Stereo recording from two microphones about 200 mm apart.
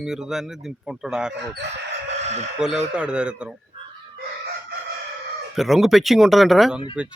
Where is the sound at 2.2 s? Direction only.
35° right (ahead or behind).